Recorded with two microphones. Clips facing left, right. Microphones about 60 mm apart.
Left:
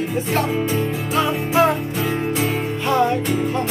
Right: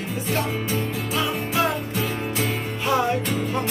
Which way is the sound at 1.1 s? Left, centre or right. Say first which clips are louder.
Left 6 dB; left.